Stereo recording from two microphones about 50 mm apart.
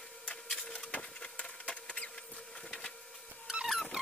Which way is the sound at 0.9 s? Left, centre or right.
Left.